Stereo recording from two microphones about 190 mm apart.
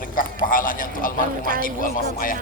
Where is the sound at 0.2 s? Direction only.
45° left (ahead or behind).